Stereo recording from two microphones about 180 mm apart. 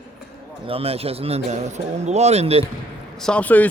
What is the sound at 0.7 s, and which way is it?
Speech, 35° right (ahead or behind).